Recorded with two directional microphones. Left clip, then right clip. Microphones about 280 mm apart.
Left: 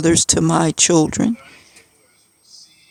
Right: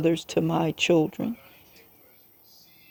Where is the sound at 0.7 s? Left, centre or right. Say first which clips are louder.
Left 7 dB; left.